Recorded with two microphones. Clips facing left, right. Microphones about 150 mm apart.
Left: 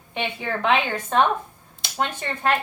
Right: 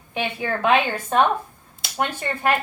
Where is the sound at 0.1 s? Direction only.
10° right (ahead or behind).